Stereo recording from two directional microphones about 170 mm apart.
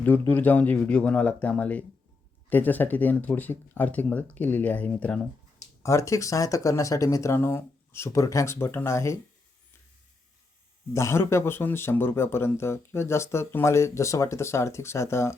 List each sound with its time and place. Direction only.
0.0 s speech: 10° left (ahead or behind)
10.9 s speech: 15° left (ahead or behind)